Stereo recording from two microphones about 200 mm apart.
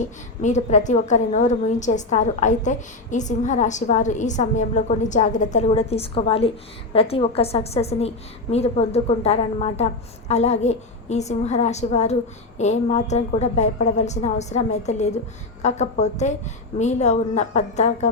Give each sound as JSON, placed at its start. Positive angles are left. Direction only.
{"t": 0.0, "sound": "a woman's voice", "side_deg": 35}